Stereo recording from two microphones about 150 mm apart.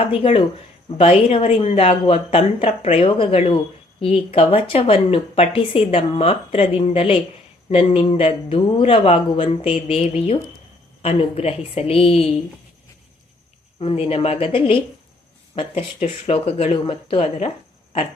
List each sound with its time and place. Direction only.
0.0 s speech: 40° left (ahead or behind)
13.7 s speech: 40° left (ahead or behind)